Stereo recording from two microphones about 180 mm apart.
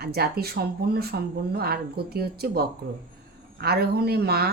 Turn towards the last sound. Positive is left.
turn(degrees=-60)  # may be behind; listen again after turning